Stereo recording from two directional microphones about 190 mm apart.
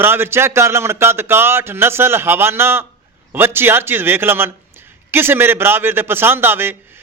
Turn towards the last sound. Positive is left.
turn(degrees=-10)  # may be behind; listen again after turning